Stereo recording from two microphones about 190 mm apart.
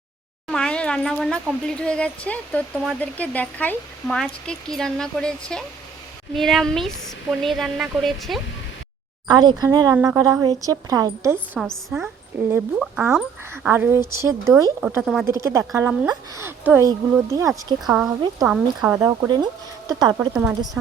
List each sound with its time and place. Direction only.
0.4 s speech: 5° left (ahead or behind)
9.2 s speech: 20° right (ahead or behind)
11.5 s speech: centre (ahead or behind)
15.4 s speech: 15° right (ahead or behind)
17.8 s speech: 5° right (ahead or behind); by 20.1 s 20° right (ahead or behind)
20.1 s speech: 5° right (ahead or behind)